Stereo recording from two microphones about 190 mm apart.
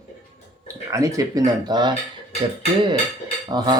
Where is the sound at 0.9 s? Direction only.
15° right (ahead or behind).